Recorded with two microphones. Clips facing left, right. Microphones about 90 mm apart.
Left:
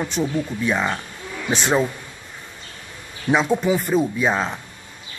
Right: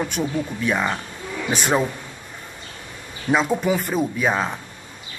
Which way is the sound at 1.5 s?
10° right (ahead or behind).